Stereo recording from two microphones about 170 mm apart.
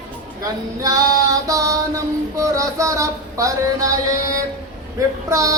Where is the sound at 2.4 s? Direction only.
20° right (ahead or behind).